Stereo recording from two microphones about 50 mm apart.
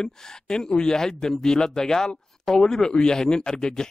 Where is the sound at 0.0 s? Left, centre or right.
Centre.